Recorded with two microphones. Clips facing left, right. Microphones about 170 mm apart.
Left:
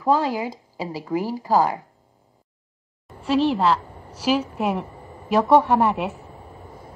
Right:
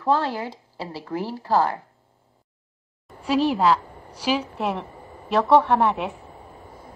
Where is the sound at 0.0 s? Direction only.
10° left (ahead or behind).